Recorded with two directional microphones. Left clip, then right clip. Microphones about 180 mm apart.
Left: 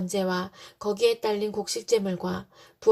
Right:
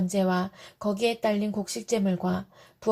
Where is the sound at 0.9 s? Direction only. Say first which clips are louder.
Left 2 dB; 30° left (ahead or behind).